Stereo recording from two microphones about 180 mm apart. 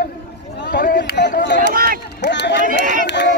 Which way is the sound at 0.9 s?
75° left (ahead or behind).